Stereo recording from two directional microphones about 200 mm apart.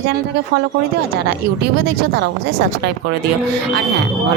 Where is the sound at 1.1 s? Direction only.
55° right (ahead or behind).